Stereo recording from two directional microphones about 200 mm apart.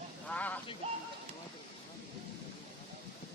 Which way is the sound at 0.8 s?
30° right (ahead or behind).